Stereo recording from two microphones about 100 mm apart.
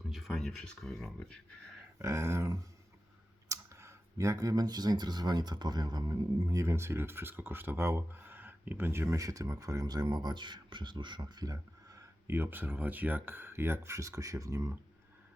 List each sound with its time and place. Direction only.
0.1 s speech: centre (ahead or behind)
2.0 s a sound: 25° right (ahead or behind)
3.5 s speech: 30° right (ahead or behind)
6.6 s speech: 25° right (ahead or behind); by 11.5 s 45° right (ahead or behind)
11.5 s speech: 30° right (ahead or behind)